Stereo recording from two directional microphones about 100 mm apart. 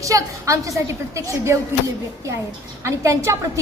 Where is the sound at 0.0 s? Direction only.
35° right (ahead or behind).